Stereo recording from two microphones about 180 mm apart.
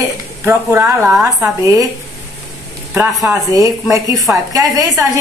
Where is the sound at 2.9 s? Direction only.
10° right (ahead or behind).